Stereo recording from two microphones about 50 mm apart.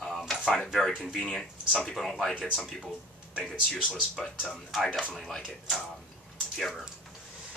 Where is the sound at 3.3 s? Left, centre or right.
Centre.